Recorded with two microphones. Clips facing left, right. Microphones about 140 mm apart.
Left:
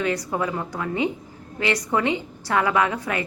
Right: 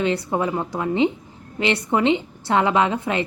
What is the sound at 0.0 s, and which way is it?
A woman's voice, 25° right (ahead or behind).